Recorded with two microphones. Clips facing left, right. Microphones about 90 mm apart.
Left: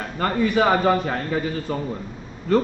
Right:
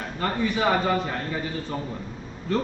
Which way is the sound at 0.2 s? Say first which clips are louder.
Left 5 dB; 50° left (ahead or behind).